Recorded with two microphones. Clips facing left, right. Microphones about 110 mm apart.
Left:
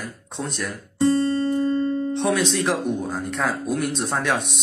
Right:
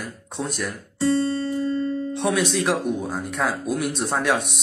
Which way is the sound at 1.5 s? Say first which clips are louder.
Left 3 dB; 50° left (ahead or behind).